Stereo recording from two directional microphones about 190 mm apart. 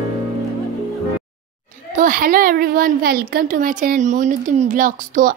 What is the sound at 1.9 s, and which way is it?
A child's voice, 45° right (ahead or behind).